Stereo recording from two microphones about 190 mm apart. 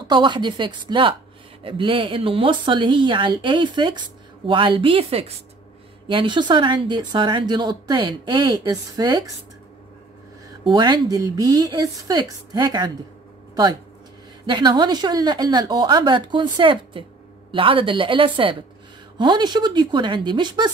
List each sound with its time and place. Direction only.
0.1 s speech: 25° right (ahead or behind)
10.7 s speech: 20° right (ahead or behind)
14.4 s speech: 25° right (ahead or behind)